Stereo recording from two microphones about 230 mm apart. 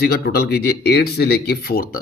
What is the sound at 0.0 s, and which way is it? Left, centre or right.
Speech, left.